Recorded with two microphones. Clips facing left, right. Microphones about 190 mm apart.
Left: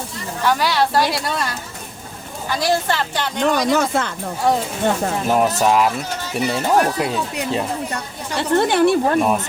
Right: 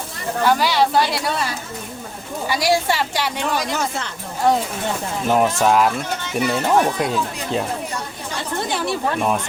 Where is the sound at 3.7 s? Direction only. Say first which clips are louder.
Left 6 dB; 55° left (ahead or behind).